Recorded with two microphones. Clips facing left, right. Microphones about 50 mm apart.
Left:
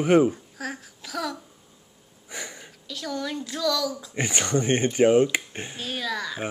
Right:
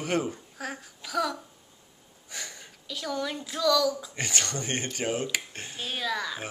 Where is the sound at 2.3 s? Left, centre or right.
Centre.